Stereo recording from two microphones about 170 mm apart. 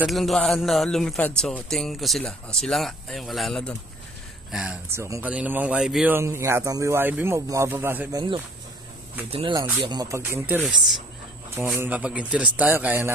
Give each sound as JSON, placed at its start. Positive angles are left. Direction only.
{"t": 0.0, "sound": "a man's voice", "side_deg": 0}
{"t": 4.8, "sound": "speech", "side_deg": -15}
{"t": 6.1, "sound": "speech", "side_deg": -15}
{"t": 8.1, "sound": "speech", "side_deg": -25}
{"t": 9.8, "sound": "speech", "side_deg": -20}